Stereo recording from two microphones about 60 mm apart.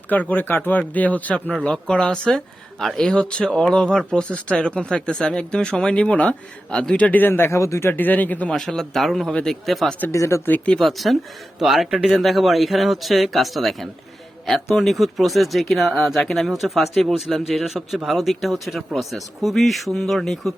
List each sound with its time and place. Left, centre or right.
0.1 s speech: left
1.6 s speech: centre; by 7.9 s left
7.9 s speech: left
8.4 s speech: centre
9.3 s speech: centre
9.6 s speech: centre
10.1 s speech: left
10.8 s speech: centre